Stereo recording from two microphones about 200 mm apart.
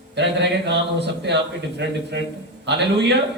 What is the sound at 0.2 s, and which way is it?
A man's voice, 60° right (ahead or behind).